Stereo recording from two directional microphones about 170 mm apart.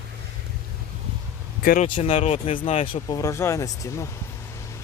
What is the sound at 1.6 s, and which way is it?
Speech, 55° left (ahead or behind).